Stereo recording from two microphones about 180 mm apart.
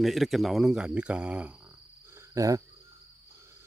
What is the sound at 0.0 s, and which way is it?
Speech, centre (ahead or behind).